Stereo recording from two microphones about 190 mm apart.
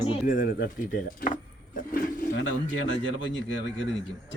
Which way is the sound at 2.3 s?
75° left (ahead or behind).